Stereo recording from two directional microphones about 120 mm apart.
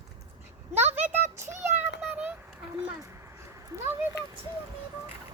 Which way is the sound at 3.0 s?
25° right (ahead or behind).